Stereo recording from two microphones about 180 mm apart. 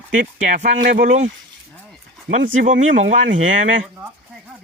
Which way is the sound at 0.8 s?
60° right (ahead or behind).